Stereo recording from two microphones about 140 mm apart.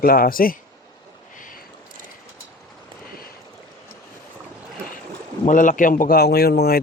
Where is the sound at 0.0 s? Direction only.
90° left.